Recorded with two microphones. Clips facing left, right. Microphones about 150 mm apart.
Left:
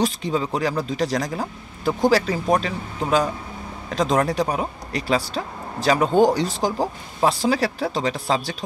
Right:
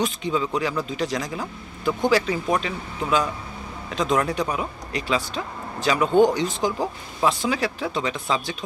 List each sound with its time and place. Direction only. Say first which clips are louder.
0.0 s speech: left 2 dB; 40° left (ahead or behind)